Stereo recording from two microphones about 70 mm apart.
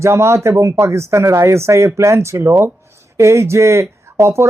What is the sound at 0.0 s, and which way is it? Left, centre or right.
Speech, right.